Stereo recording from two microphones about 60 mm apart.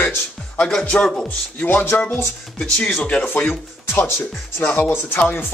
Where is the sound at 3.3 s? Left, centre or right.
Left.